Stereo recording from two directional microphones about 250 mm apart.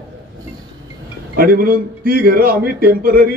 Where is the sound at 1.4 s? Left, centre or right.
Right.